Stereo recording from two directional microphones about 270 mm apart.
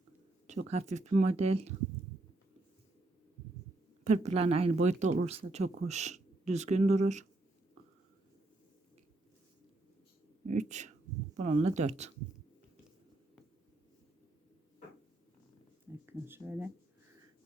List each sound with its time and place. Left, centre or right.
0.4 s speech: right
4.0 s speech: right
10.4 s speech: right
15.9 s a sound: centre